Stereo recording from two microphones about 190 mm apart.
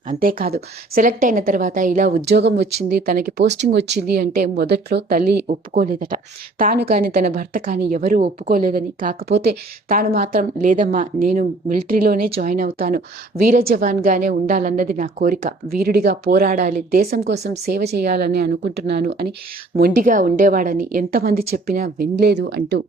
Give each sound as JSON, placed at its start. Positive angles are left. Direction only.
{"t": 0.1, "sound": "a woman's voice", "side_deg": -50}
{"t": 2.9, "sound": "a woman's voice", "side_deg": -50}